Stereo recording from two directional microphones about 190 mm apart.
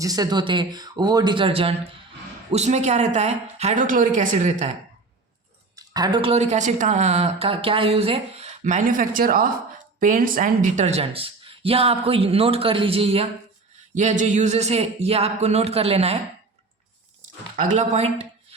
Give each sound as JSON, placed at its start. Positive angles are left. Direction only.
{"t": 0.0, "sound": "a woman's voice", "side_deg": -20}
{"t": 5.7, "sound": "a woman's voice", "side_deg": -20}
{"t": 17.6, "sound": "a woman's voice", "side_deg": -40}